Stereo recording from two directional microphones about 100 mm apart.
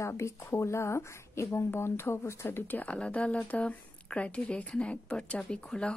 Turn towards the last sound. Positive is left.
turn(degrees=10)  # may be behind; listen again after turning